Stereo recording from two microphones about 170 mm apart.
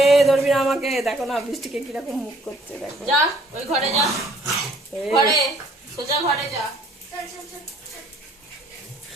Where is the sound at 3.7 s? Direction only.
40° right (ahead or behind).